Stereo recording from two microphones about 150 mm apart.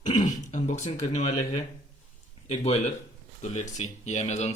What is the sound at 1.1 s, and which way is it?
Speech, 50° left (ahead or behind).